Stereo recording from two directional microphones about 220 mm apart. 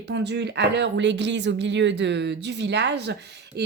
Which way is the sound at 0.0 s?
50° right (ahead or behind).